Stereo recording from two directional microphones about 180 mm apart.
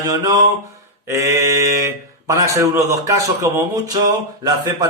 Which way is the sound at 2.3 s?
20° right (ahead or behind).